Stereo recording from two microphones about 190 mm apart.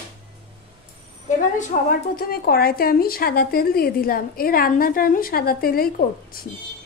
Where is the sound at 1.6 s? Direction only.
45° left (ahead or behind).